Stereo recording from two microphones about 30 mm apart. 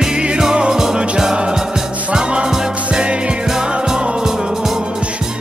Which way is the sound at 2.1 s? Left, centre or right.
Right.